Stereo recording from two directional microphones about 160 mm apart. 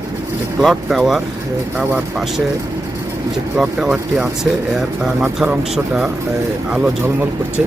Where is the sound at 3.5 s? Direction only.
5° right (ahead or behind).